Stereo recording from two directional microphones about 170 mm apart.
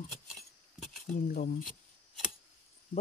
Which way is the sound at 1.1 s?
60° left (ahead or behind).